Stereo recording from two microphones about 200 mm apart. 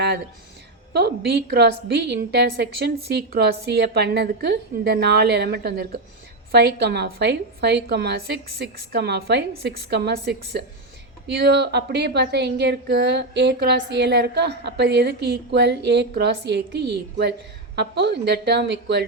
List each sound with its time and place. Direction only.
0.9 s a woman's voice: 55° right (ahead or behind)